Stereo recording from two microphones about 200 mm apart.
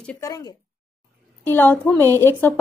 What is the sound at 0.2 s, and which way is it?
A woman's voice, 20° left (ahead or behind).